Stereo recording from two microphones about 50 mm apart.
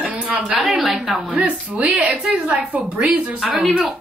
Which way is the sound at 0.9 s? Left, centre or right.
Centre.